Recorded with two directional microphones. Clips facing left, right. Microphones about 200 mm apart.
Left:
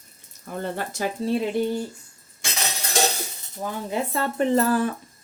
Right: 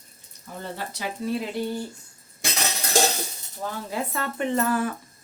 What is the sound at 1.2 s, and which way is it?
Speech, 30° left (ahead or behind).